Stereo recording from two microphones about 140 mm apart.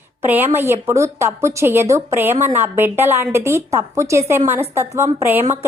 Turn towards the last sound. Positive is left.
turn(degrees=-15)  # may be behind; listen again after turning